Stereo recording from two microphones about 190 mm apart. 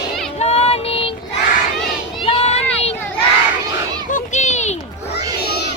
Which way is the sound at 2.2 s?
30° left (ahead or behind).